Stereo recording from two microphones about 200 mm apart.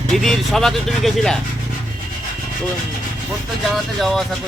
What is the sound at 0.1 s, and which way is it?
Speech, centre (ahead or behind).